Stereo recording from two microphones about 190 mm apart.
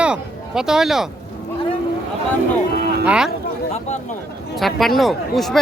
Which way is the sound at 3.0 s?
5° right (ahead or behind).